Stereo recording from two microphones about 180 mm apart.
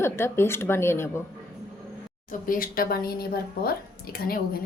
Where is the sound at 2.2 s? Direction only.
50° left (ahead or behind).